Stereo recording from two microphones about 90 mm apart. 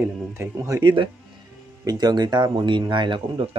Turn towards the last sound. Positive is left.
turn(degrees=-60)  # may be behind; listen again after turning